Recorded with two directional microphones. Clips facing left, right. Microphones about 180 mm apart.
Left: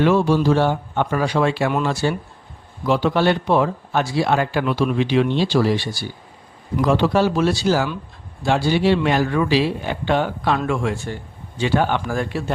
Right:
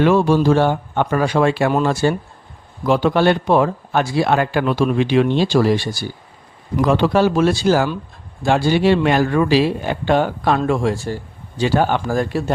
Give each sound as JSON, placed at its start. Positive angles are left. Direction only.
{"t": 0.0, "sound": "a man's voice", "side_deg": -50}
{"t": 4.6, "sound": "a man's voice", "side_deg": -40}